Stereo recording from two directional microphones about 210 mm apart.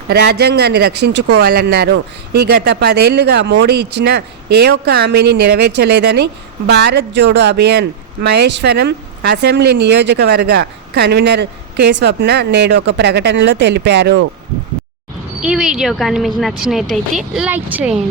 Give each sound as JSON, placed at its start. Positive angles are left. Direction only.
{"t": 0.1, "sound": "speech", "side_deg": -50}
{"t": 15.4, "sound": "speech", "side_deg": -5}